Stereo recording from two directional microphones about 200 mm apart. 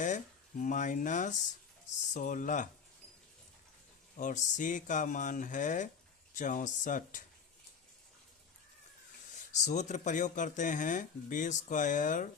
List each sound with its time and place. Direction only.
0.0 s speech: 40° left (ahead or behind)
4.2 s speech: 40° left (ahead or behind)
9.5 s speech: 35° left (ahead or behind)